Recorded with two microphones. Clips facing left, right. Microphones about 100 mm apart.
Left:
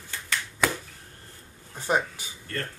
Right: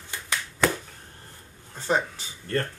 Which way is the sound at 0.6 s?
5° left (ahead or behind).